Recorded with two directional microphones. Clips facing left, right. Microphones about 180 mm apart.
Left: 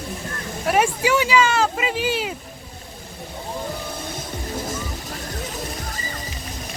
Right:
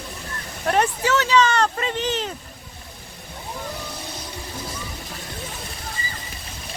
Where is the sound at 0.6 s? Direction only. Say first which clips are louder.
Left 1 dB; 5° left (ahead or behind).